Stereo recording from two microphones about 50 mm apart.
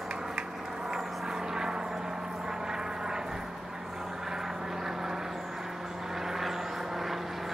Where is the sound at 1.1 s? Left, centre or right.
Centre.